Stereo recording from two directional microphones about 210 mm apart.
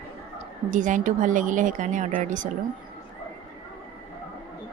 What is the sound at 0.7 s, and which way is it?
A woman's voice, 40° right (ahead or behind).